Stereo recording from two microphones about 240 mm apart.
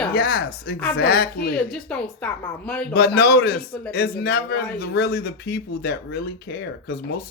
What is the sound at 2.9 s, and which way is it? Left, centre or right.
Speech, left.